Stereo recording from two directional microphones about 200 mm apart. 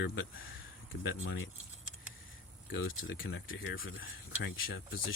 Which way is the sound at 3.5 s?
50° left (ahead or behind).